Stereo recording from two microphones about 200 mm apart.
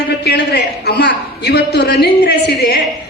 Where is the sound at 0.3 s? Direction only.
60° left (ahead or behind).